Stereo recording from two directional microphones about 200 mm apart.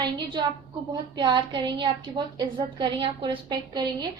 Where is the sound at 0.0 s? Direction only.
20° right (ahead or behind).